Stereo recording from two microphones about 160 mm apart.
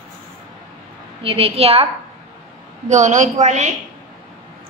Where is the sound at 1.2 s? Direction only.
35° right (ahead or behind).